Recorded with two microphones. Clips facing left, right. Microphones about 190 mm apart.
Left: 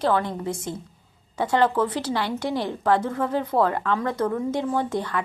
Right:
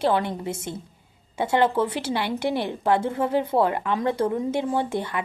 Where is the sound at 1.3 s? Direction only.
25° right (ahead or behind).